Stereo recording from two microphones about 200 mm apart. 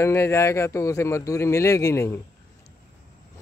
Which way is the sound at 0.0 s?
10° left (ahead or behind).